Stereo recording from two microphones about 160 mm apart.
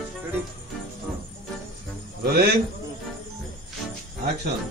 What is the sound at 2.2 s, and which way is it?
Speech, 90° right.